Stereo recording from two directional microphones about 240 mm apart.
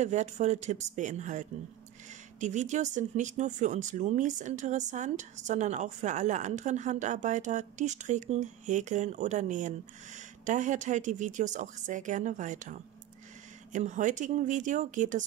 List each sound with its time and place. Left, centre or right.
0.0 s speech: right